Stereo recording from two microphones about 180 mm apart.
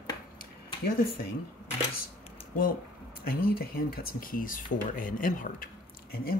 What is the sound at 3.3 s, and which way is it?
Speech, 55° left (ahead or behind).